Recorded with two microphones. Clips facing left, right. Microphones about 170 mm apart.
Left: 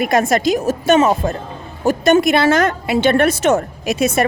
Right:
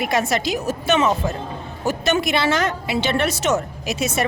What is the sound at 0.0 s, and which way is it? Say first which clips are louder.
A woman's voice: left 6 dB; 50° left (ahead or behind).